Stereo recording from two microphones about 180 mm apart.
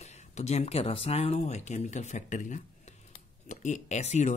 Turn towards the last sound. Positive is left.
turn(degrees=40)  # may be behind; listen again after turning